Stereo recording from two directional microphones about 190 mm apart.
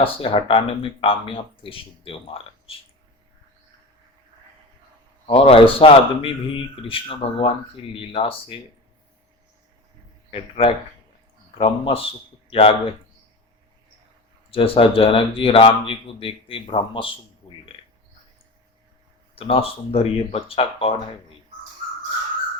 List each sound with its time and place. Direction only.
0.0 s speech: 30° left (ahead or behind)
5.2 s speech: 30° left (ahead or behind)
10.3 s speech: 30° left (ahead or behind)
14.5 s speech: 30° left (ahead or behind)
19.4 s speech: 30° left (ahead or behind)